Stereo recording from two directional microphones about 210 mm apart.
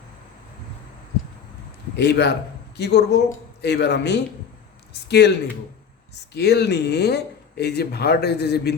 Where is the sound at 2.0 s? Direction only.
55° left (ahead or behind).